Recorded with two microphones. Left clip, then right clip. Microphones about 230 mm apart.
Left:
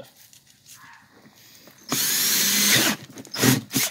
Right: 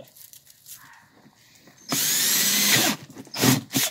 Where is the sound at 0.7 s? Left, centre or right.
Right.